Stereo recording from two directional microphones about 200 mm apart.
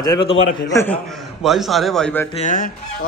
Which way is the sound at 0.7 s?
10° left (ahead or behind).